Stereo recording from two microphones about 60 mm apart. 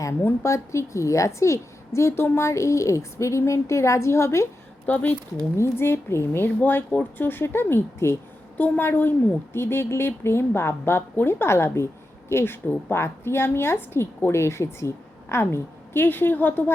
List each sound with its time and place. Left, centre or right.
0.4 s a woman's voice: left
4.9 s a woman's voice: left
5.5 s a woman's voice: left
6.6 s speech: left
8.5 s a woman's voice: left
9.5 s a woman's voice: left